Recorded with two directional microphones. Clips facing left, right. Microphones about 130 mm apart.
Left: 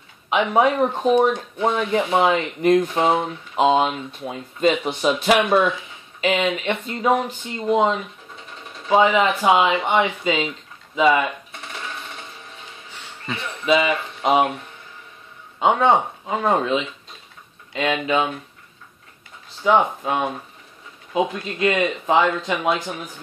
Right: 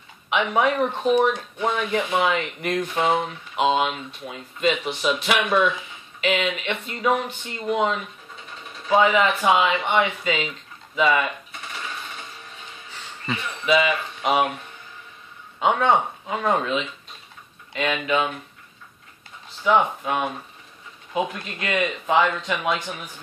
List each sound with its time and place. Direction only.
0.3 s speech: 30° left (ahead or behind)
2.0 s speech: 35° left (ahead or behind)
13.7 s speech: 20° left (ahead or behind)
15.6 s speech: 25° left (ahead or behind)
19.6 s speech: 25° left (ahead or behind)